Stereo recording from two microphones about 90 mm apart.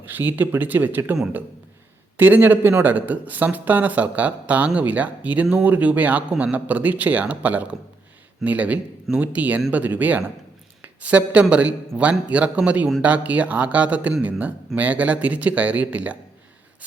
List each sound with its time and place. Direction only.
0.0 s speech: 20° right (ahead or behind)
2.1 s speech: 20° right (ahead or behind)